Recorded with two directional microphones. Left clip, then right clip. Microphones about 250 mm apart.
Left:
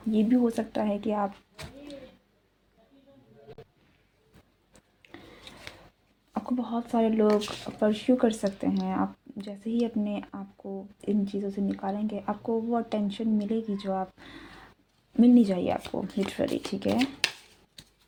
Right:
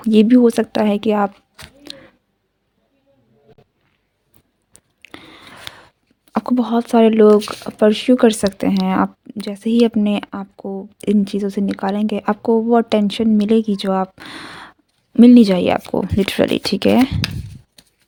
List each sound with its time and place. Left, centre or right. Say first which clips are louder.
0.0 s speech: right 14 dB; right
4.7 s chewing: right 11 dB; right
6.3 s speech: right 13 dB; right
7.3 s speech: right 13 dB; right
17.0 s speech: right 9 dB; right